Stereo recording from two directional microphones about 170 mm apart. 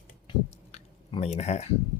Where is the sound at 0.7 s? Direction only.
40° left (ahead or behind).